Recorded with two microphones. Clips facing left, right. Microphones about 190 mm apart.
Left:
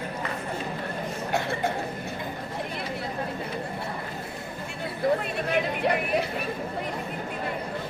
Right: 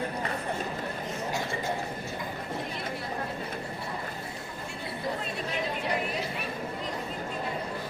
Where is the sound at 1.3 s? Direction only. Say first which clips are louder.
Left 6 dB; 60° left (ahead or behind).